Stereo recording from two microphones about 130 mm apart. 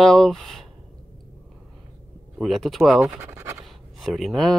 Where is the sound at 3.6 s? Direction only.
Centre (ahead or behind).